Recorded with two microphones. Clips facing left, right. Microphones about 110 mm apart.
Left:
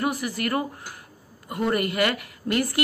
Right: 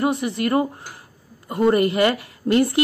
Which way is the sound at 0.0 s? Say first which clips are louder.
Right 5 dB; 25° right (ahead or behind).